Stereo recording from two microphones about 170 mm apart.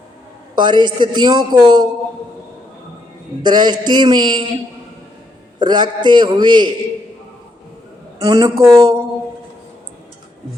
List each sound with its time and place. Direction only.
0.5 s a man's voice: 25° right (ahead or behind)
3.4 s a man's voice: 25° right (ahead or behind)
5.5 s a man's voice: 25° right (ahead or behind)
8.2 s a man's voice: 20° right (ahead or behind)